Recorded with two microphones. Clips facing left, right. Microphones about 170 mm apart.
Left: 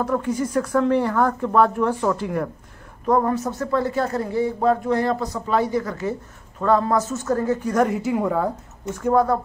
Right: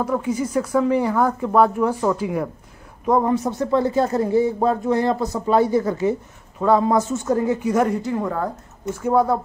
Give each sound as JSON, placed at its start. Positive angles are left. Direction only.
{"t": 0.0, "sound": "speech", "side_deg": -5}
{"t": 6.6, "sound": "speech", "side_deg": -10}
{"t": 8.9, "sound": "speech", "side_deg": -5}